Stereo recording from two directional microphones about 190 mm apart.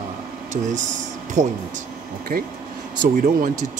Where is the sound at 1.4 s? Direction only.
40° right (ahead or behind).